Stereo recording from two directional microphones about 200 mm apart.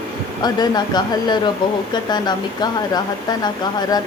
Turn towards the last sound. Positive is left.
turn(degrees=20)  # may be behind; listen again after turning